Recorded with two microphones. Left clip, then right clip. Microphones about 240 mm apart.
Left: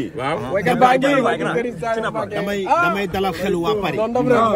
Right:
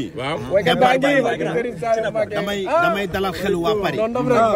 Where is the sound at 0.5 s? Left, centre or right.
Centre.